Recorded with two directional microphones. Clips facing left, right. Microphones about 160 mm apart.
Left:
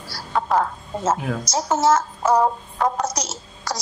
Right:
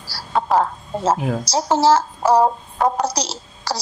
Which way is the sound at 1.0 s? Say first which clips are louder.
Right 3 dB; 30° right (ahead or behind).